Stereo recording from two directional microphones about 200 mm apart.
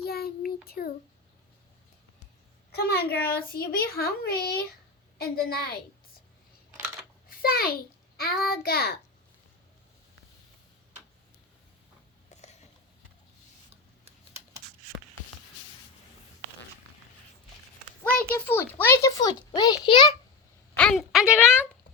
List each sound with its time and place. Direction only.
0.0 s child singing: 50° left (ahead or behind)
2.7 s a child's voice: 50° left (ahead or behind)
7.3 s a child's voice: 50° left (ahead or behind)
12.3 s a sound: 35° left (ahead or behind)
14.0 s typing: 10° right (ahead or behind)
18.0 s a child's voice: 10° left (ahead or behind)
20.7 s a woman's voice: centre (ahead or behind)